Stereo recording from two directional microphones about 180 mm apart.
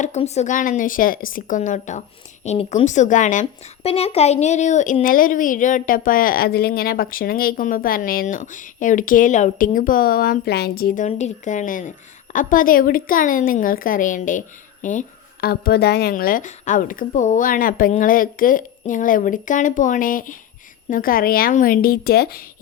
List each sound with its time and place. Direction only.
0.0 s a woman's voice: 40° left (ahead or behind); by 22.4 s 60° left (ahead or behind)